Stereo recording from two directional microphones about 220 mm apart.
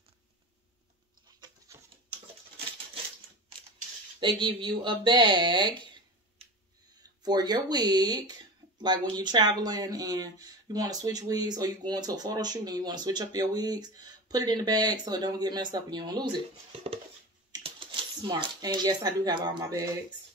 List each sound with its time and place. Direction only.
1.4 s a sound: 20° right (ahead or behind)
4.2 s speech: 20° right (ahead or behind)
7.0 s speech: 20° right (ahead or behind)